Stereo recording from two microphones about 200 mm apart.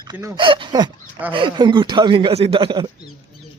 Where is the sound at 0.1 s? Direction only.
20° right (ahead or behind).